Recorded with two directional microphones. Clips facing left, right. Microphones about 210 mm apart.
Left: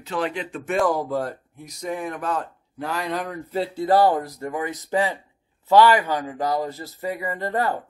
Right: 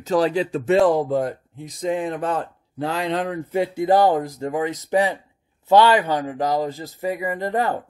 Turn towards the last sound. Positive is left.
turn(degrees=-15)  # may be behind; listen again after turning